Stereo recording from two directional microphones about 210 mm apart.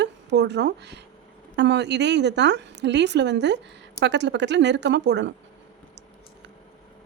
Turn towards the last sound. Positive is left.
turn(degrees=-55)  # may be behind; listen again after turning